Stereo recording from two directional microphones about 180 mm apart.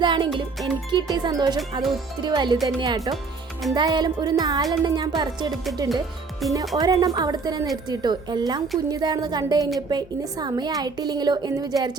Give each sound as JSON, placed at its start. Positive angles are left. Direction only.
{"t": 0.0, "sound": "music", "side_deg": -25}
{"t": 0.3, "sound": "a woman's voice", "side_deg": -25}
{"t": 6.4, "sound": "speech", "side_deg": 0}
{"t": 6.7, "sound": "a woman's voice", "side_deg": -20}